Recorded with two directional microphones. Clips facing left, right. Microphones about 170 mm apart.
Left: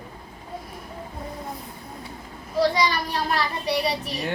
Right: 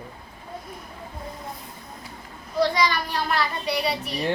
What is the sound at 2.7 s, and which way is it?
A child's voice, 35° left (ahead or behind).